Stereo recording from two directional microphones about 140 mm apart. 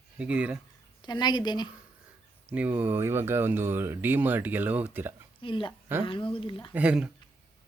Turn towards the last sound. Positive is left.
turn(degrees=-10)  # may be behind; listen again after turning